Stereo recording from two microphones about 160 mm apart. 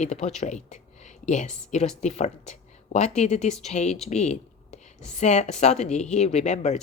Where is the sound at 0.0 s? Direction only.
45° left (ahead or behind).